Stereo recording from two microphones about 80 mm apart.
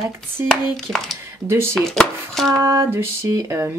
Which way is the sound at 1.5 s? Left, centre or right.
Right.